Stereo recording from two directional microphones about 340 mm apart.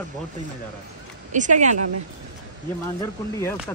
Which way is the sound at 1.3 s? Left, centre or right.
Right.